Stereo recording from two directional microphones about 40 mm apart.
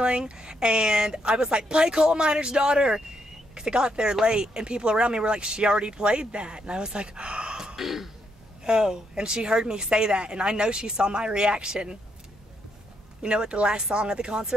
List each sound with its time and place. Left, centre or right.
0.0 s speech: right
7.5 s throat clearing: centre
8.6 s speech: centre
13.2 s speech: right